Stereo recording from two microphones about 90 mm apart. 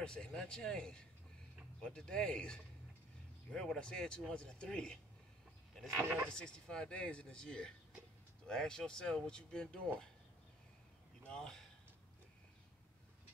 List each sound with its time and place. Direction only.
0.0 s speech: 10° left (ahead or behind)
5.9 s speech: 20° right (ahead or behind)
6.2 s speech: 10° left (ahead or behind)
11.2 s speech: 10° left (ahead or behind)